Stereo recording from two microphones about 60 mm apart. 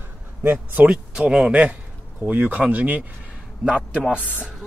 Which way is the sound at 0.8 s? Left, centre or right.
Centre.